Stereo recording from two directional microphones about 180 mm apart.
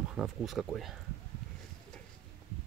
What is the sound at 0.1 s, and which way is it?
Speech, 5° right (ahead or behind).